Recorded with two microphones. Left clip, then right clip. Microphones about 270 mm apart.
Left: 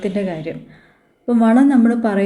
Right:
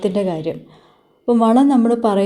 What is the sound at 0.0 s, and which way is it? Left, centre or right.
Speech, right.